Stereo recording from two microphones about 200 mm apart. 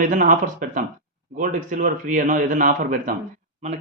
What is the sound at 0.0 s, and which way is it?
Speech, 40° right (ahead or behind).